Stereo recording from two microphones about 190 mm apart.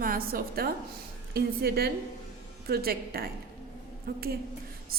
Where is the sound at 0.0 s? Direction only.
50° right (ahead or behind).